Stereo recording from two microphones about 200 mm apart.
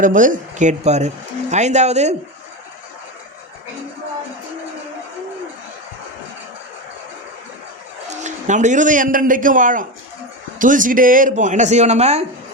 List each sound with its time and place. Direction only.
0.0 s speech: 40° right (ahead or behind)
8.1 s a man's voice: 35° right (ahead or behind)